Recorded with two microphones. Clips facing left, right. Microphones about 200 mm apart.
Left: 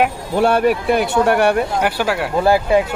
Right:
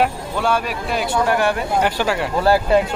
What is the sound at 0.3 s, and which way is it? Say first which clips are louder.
Speech: left 7 dB; 60° left (ahead or behind).